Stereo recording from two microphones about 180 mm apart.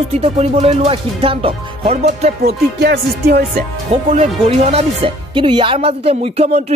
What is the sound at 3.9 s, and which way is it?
Speech, 40° right (ahead or behind).